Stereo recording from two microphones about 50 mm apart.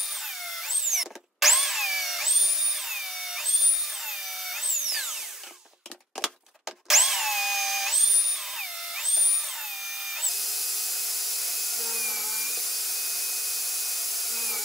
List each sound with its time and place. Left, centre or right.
0.0 s drill: centre
6.2 s a sound: centre
6.6 s drill: centre
10.1 s tools: centre